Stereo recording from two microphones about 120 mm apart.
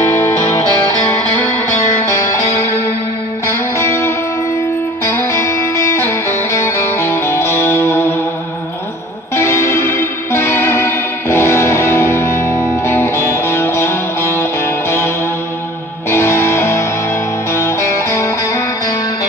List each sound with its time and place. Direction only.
0.0 s music: 20° left (ahead or behind)
9.3 s music: 20° left (ahead or behind)
16.1 s music: 20° left (ahead or behind)